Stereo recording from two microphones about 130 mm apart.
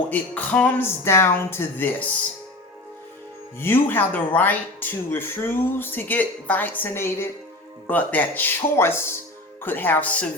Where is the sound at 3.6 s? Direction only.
20° left (ahead or behind).